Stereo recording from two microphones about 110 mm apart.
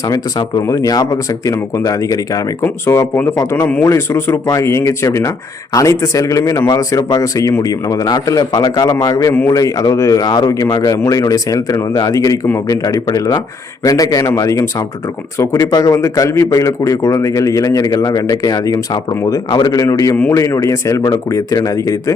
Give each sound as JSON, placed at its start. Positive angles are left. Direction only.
{"t": 0.1, "sound": "speech", "side_deg": 35}